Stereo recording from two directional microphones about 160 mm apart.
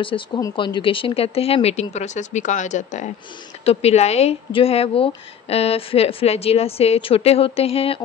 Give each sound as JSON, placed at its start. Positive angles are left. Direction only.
{"t": 0.4, "sound": "speech", "side_deg": 30}